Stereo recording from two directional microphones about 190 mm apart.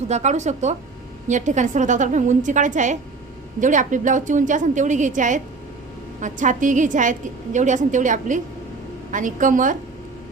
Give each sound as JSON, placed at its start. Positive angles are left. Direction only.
{"t": 0.1, "sound": "a woman's voice", "side_deg": -40}